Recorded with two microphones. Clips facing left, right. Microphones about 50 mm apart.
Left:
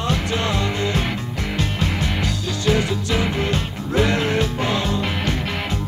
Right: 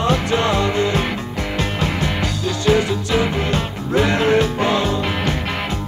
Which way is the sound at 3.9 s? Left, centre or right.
Right.